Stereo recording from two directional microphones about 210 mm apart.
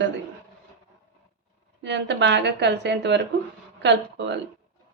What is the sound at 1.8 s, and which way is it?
A woman's voice, 60° right (ahead or behind).